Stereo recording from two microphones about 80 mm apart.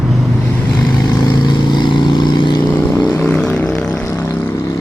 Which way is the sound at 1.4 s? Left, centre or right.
Left.